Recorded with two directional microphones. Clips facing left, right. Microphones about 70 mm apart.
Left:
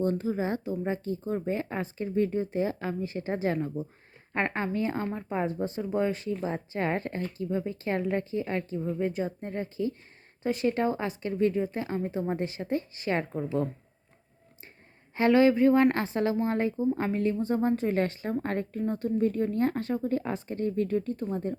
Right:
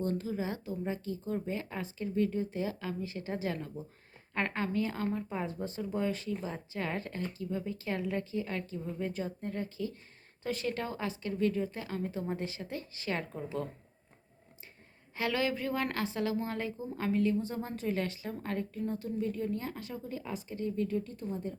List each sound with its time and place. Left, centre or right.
0.0 s speech: left
15.1 s speech: left